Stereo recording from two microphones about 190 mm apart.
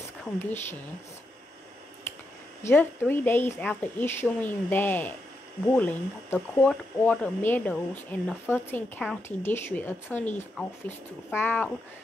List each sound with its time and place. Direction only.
0.2 s speech: 10° left (ahead or behind)
2.7 s speech: 10° left (ahead or behind)